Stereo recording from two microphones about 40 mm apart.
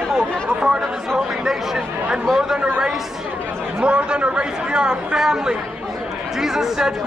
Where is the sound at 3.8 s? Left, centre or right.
Right.